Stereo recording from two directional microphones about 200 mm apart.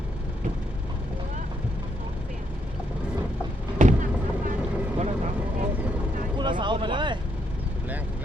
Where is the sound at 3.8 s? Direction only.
40° right (ahead or behind).